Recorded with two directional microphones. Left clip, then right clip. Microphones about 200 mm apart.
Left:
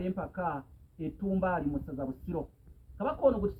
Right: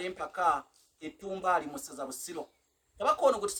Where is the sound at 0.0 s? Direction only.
40° right (ahead or behind).